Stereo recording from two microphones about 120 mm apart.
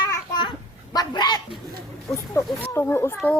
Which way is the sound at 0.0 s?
35° left (ahead or behind).